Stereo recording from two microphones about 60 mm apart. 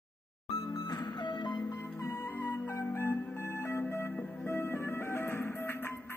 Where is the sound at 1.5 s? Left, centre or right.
Left.